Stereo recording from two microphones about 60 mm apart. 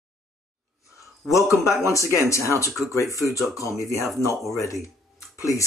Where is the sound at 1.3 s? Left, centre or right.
Left.